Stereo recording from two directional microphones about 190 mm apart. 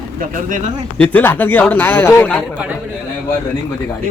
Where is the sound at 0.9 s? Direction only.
10° left (ahead or behind).